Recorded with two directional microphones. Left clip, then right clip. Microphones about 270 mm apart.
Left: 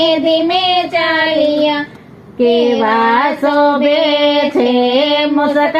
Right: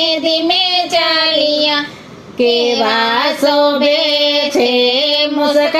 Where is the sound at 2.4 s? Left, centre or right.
Right.